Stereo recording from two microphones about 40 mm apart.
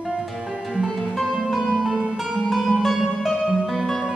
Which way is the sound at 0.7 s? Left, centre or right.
Centre.